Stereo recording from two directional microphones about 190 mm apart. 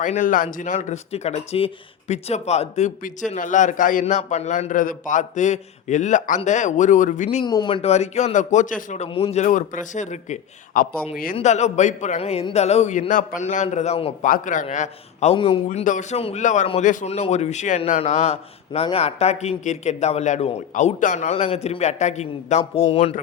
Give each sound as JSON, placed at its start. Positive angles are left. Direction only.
{"t": 0.0, "sound": "speech", "side_deg": 40}
{"t": 7.4, "sound": "speech", "side_deg": 25}
{"t": 11.3, "sound": "speech", "side_deg": 35}
{"t": 14.3, "sound": "speech", "side_deg": 45}
{"t": 15.8, "sound": "speech", "side_deg": 40}